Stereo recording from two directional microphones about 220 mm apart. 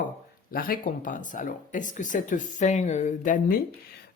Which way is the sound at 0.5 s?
40° left (ahead or behind).